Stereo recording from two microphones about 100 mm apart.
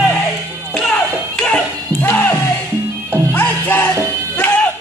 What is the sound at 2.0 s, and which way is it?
Music, 15° left (ahead or behind).